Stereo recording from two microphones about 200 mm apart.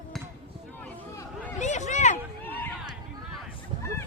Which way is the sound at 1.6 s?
35° left (ahead or behind).